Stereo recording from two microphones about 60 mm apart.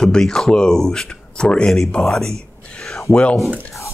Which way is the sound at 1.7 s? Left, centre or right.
Centre.